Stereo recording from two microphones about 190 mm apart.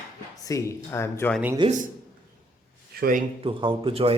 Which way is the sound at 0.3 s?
15° left (ahead or behind).